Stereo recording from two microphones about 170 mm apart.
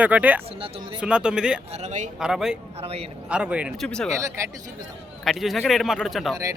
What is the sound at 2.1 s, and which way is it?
A man's voice, 5° right (ahead or behind).